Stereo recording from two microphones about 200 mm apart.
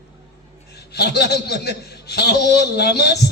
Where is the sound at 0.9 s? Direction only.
55° left (ahead or behind).